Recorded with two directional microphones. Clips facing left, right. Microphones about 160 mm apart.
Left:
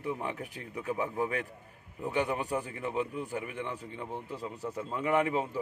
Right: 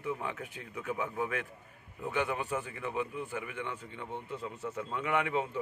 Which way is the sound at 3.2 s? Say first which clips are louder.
Left 2 dB; 40° left (ahead or behind).